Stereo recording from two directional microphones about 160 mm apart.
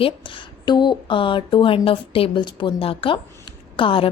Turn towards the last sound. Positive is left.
turn(degrees=35)  # may be behind; listen again after turning